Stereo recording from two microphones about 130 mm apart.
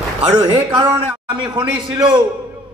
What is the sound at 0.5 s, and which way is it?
Speech, 25° right (ahead or behind).